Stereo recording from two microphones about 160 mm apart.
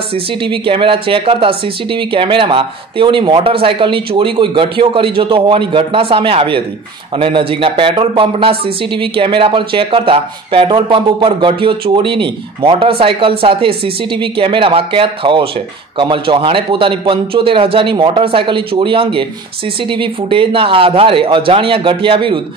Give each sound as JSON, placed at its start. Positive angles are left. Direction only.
{"t": 0.1, "sound": "speech", "side_deg": -30}